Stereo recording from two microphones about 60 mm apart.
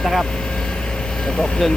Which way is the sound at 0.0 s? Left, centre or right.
Centre.